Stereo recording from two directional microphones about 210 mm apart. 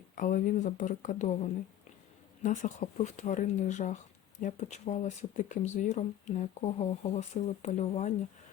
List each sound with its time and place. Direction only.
0.2 s speech: 40° left (ahead or behind)
2.4 s speech: 35° left (ahead or behind)